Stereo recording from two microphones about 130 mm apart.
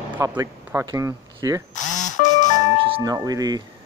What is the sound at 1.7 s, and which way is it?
Music, 70° left (ahead or behind).